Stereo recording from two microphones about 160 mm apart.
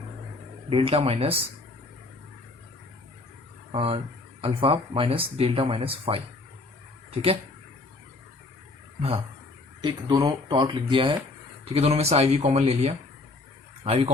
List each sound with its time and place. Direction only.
0.7 s speech: 35° right (ahead or behind)
3.7 s speech: 35° right (ahead or behind)
9.0 s a sound: 35° right (ahead or behind)
9.8 s speech: 25° right (ahead or behind)